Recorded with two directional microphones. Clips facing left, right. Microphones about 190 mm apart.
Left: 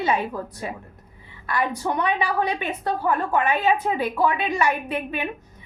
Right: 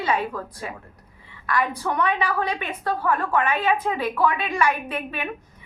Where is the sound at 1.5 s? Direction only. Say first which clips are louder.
Even; 20° left (ahead or behind).